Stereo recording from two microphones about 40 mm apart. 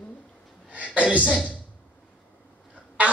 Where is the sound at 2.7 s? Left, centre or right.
Right.